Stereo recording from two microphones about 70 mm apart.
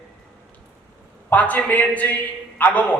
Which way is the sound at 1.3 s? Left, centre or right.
Left.